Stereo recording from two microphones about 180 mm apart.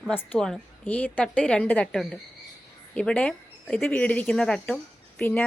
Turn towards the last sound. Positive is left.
turn(degrees=10)  # may be behind; listen again after turning